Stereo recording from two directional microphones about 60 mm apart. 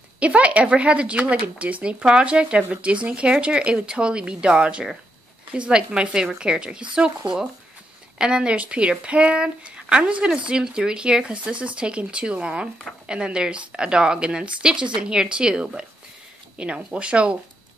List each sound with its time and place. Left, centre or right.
0.2 s speech: right